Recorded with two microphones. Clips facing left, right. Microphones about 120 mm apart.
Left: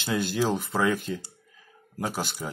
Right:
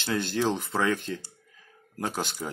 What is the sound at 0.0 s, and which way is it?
Speech, 10° left (ahead or behind).